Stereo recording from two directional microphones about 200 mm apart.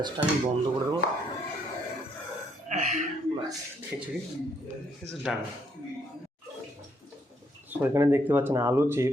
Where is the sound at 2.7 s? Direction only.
35° right (ahead or behind).